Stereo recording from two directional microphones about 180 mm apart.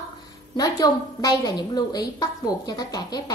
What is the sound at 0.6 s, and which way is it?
A woman's voice, 20° left (ahead or behind).